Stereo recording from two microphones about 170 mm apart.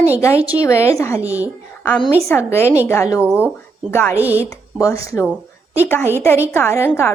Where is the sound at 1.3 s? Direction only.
10° right (ahead or behind).